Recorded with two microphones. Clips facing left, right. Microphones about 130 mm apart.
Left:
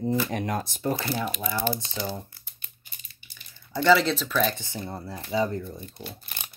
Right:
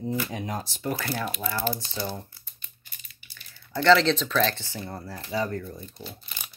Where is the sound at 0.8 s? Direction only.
20° left (ahead or behind).